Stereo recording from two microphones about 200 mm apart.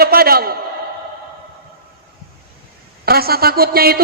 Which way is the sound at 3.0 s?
50° right (ahead or behind).